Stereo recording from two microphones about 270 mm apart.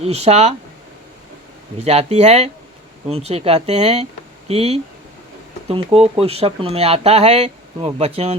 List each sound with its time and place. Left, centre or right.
0.0 s speech: right
1.8 s speech: right